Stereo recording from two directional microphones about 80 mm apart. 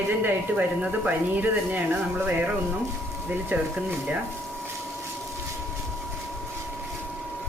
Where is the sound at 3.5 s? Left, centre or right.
Right.